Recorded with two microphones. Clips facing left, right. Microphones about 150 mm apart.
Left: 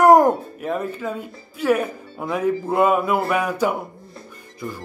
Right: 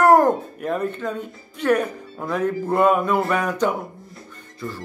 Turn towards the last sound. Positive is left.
turn(degrees=10)  # may be behind; listen again after turning